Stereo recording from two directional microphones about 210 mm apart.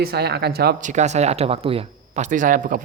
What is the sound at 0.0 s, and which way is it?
Speech, 50° right (ahead or behind).